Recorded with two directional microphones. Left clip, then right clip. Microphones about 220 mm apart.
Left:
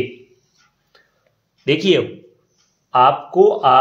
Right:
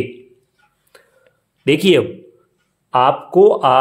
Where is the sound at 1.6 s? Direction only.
50° right (ahead or behind).